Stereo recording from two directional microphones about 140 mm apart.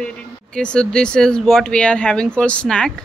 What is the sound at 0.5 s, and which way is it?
Speech, 5° left (ahead or behind).